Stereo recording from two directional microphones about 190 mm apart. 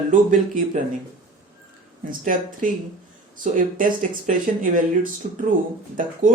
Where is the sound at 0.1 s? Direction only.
40° right (ahead or behind).